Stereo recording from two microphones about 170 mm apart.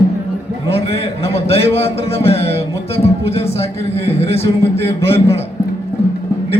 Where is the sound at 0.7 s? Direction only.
35° left (ahead or behind).